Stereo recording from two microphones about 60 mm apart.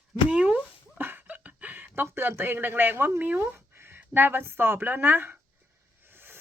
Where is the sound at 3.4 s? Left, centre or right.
Right.